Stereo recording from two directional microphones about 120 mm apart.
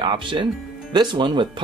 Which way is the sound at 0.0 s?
40° right (ahead or behind).